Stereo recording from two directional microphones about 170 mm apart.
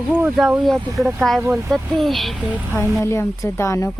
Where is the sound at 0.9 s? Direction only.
15° right (ahead or behind).